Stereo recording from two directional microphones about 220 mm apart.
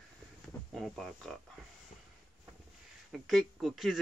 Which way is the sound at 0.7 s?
Centre (ahead or behind).